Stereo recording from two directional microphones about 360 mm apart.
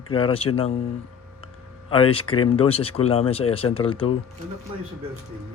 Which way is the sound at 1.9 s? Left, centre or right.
Centre.